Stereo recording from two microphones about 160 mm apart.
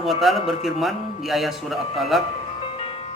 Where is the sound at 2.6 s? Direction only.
35° left (ahead or behind).